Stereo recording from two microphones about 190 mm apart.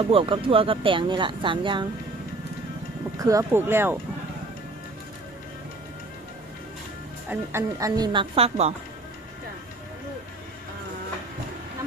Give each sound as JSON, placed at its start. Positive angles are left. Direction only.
{"t": 0.0, "sound": "speech", "side_deg": -30}
{"t": 3.2, "sound": "speech", "side_deg": -15}
{"t": 7.3, "sound": "speech", "side_deg": -15}